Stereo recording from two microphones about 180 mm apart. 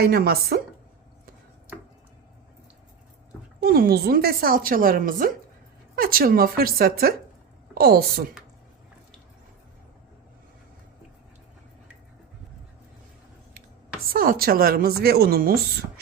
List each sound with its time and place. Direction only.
0.0 s speech: 60° right (ahead or behind)
3.6 s a woman's voice: 60° right (ahead or behind)
14.1 s speech: 55° right (ahead or behind)